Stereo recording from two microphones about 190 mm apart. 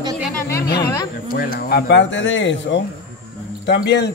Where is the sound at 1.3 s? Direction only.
55° left (ahead or behind); by 2.8 s 75° left (ahead or behind).